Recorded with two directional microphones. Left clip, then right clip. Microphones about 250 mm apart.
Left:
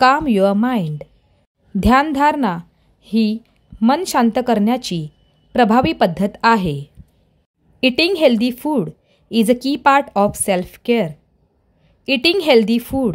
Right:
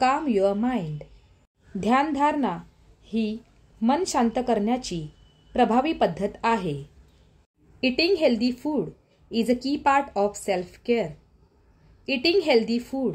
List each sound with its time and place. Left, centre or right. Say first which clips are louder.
0.0 s a woman's voice: left 8 dB; left
7.8 s speech: left 8 dB; left